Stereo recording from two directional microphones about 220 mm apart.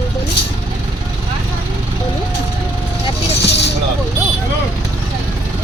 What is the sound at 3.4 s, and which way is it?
Speech, 50° left (ahead or behind).